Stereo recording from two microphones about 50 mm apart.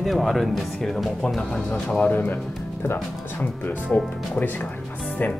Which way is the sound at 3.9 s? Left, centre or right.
Left.